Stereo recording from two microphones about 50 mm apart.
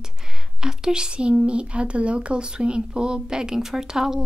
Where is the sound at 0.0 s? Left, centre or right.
Centre.